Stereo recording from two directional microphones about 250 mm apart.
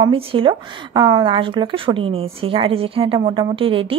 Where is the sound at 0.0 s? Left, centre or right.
Right.